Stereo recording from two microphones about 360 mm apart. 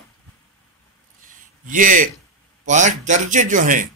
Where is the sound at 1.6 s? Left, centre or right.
Right.